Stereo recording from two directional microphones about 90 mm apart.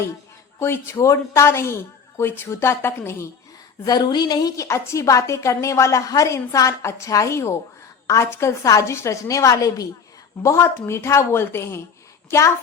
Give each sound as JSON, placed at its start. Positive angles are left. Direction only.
{"t": 0.6, "sound": "a woman's voice", "side_deg": 30}
{"t": 3.8, "sound": "a woman's voice", "side_deg": 50}
{"t": 10.4, "sound": "a woman's voice", "side_deg": 30}